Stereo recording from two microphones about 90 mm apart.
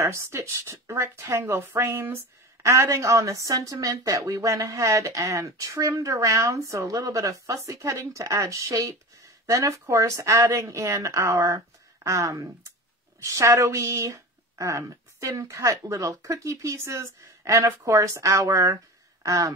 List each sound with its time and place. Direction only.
0.0 s speech: 30° right (ahead or behind)